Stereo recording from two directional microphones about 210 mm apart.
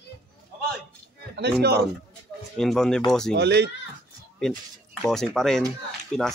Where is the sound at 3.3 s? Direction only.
55° right (ahead or behind).